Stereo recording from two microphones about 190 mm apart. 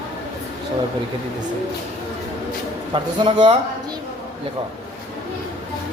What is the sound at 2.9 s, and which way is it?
Speech, 25° right (ahead or behind).